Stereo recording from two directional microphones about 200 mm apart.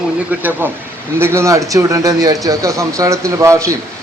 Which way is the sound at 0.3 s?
10° right (ahead or behind).